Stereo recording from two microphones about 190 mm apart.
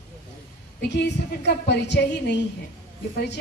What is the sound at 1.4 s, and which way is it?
A woman's voice, 65° left (ahead or behind).